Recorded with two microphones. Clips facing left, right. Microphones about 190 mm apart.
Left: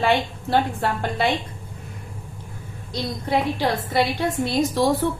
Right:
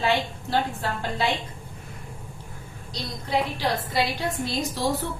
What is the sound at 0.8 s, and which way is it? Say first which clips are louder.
Speech: left 5 dB; 60° left (ahead or behind).